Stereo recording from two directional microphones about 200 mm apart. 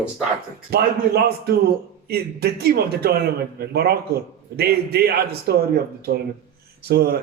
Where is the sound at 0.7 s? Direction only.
50° right (ahead or behind).